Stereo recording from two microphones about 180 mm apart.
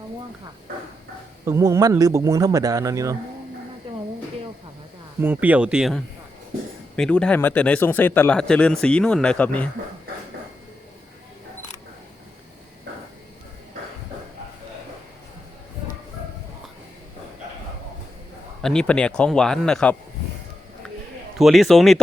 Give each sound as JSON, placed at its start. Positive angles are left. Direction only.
{"t": 1.5, "sound": "speech", "side_deg": -15}
{"t": 3.9, "sound": "a sound", "side_deg": -30}
{"t": 5.2, "sound": "speech", "side_deg": -10}
{"t": 18.6, "sound": "speech", "side_deg": 5}
{"t": 21.3, "sound": "speech", "side_deg": 0}